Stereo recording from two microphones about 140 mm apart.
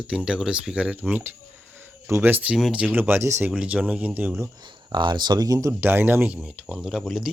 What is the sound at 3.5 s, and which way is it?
Speech, 10° right (ahead or behind).